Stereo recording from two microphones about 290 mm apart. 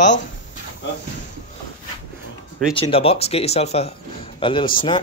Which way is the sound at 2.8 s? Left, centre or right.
Centre.